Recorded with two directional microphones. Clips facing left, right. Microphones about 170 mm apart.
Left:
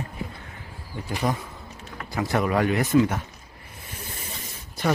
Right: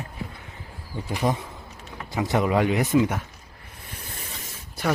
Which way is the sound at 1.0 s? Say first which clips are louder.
Right 1 dB; 20° right (ahead or behind).